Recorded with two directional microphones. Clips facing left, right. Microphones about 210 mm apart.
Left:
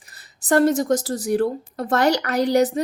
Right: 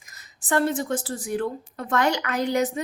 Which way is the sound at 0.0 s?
35° left (ahead or behind).